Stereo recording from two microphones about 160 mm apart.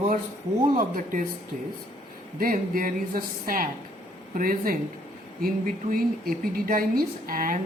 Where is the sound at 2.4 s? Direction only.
60° right (ahead or behind).